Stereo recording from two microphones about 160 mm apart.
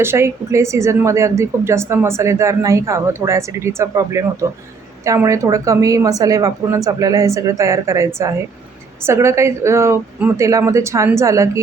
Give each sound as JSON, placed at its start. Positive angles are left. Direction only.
{"t": 0.0, "sound": "a woman's voice", "side_deg": -15}